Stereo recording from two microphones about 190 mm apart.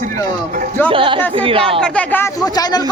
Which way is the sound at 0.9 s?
25° right (ahead or behind).